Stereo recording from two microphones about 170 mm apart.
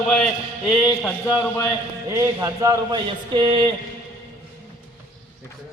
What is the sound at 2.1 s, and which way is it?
A man's voice, 20° right (ahead or behind).